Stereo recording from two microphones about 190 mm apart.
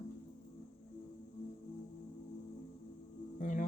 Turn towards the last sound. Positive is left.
turn(degrees=45)  # may be behind; listen again after turning